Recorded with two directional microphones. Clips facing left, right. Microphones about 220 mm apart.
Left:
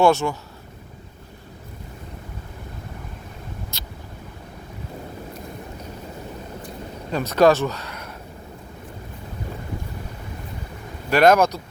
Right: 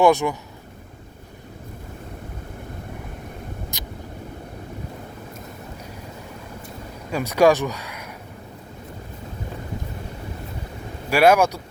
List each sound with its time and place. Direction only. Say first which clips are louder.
0.0 s speech: right 1 dB; 15° right (ahead or behind)
3.7 s vehicle: right 3 dB; 15° right (ahead or behind)
7.1 s speech: even; 10° right (ahead or behind)
11.1 s speech: even; 10° right (ahead or behind)